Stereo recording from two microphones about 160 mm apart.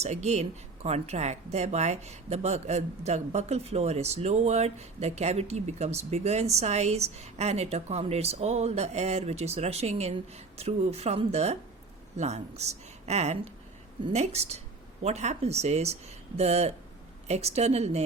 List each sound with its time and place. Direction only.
0.0 s speech: 45° right (ahead or behind)